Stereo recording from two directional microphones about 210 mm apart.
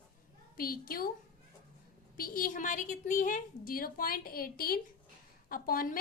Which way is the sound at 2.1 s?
45° left (ahead or behind).